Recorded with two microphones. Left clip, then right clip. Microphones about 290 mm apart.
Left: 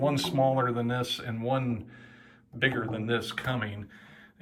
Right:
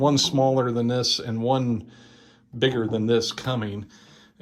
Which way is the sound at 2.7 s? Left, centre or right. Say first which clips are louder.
Right 8 dB; centre.